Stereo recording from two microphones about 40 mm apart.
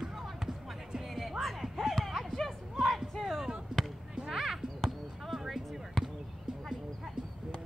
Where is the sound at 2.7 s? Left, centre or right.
Centre.